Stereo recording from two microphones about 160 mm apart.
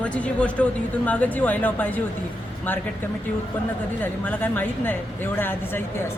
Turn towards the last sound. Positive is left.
turn(degrees=15)  # may be behind; listen again after turning